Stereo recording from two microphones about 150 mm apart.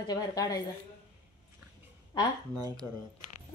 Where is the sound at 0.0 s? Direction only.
25° left (ahead or behind).